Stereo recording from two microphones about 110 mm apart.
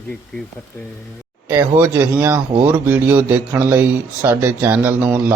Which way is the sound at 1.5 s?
20° right (ahead or behind).